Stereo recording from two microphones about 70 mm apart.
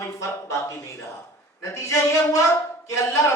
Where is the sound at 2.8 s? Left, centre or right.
Left.